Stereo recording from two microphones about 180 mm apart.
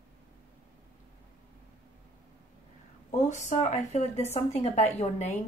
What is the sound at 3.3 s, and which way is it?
Speech, 40° left (ahead or behind).